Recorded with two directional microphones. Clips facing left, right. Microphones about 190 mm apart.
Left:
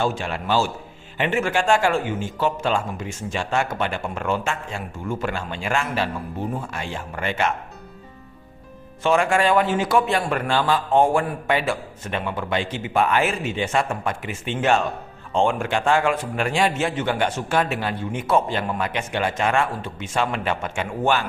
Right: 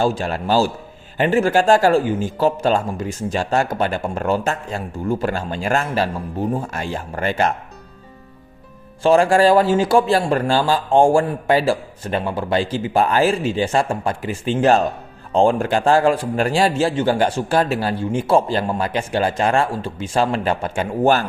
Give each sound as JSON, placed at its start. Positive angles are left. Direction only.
{"t": 0.0, "sound": "a man's voice", "side_deg": -35}
{"t": 9.0, "sound": "a man's voice", "side_deg": -35}